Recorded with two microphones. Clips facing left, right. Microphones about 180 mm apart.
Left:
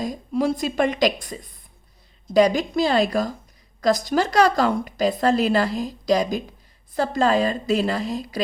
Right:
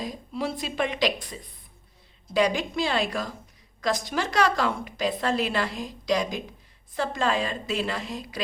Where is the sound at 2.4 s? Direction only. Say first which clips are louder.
Left 6 dB; 40° left (ahead or behind).